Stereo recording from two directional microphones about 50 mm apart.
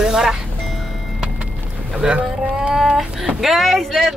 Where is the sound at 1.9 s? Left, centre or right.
Centre.